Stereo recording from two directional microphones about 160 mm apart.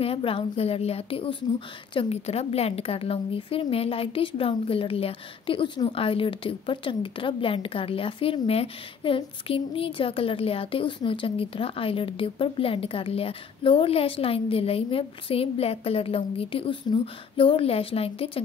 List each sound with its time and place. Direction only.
0.0 s a woman's voice: 35° left (ahead or behind)